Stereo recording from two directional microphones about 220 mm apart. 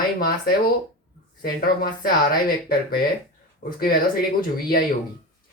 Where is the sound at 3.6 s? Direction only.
45° left (ahead or behind).